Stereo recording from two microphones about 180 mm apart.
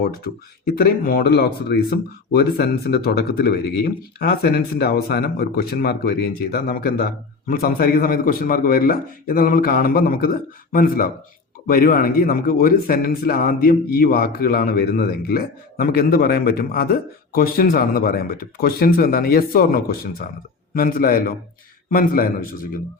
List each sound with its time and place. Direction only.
0.8 s a man's voice: 55° left (ahead or behind)